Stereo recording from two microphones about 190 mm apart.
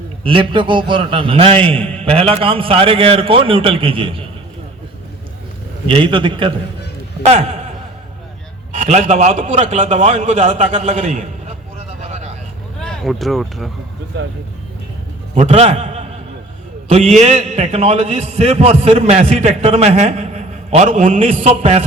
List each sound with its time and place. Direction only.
0.3 s a man's voice: 25° right (ahead or behind)
5.9 s a man's voice: 25° right (ahead or behind)
8.7 s a man's voice: 40° right (ahead or behind)
12.0 s vehicle: 35° right (ahead or behind)
12.8 s speech: 5° left (ahead or behind)
15.4 s a man's voice: 35° right (ahead or behind)